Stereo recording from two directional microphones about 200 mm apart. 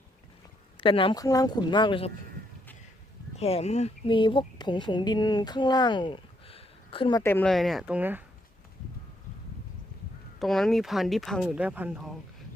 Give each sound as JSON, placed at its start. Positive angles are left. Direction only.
{"t": 0.8, "sound": "speech", "side_deg": 25}
{"t": 3.3, "sound": "speech", "side_deg": 30}
{"t": 7.2, "sound": "speech", "side_deg": 10}
{"t": 10.4, "sound": "speech", "side_deg": 0}